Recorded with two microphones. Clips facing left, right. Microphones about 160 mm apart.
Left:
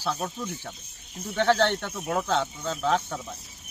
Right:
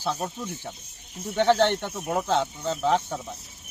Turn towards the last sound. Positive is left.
turn(degrees=-15)  # may be behind; listen again after turning